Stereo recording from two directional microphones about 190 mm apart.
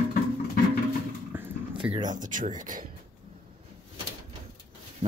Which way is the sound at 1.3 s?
10° right (ahead or behind).